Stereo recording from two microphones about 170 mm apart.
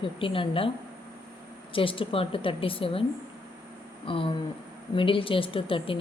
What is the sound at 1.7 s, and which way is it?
Speech, 30° left (ahead or behind).